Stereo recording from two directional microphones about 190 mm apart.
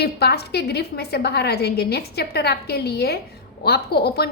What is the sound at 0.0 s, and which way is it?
A woman's voice, 60° left (ahead or behind).